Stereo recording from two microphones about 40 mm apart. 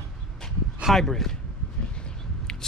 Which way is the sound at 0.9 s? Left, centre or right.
Centre.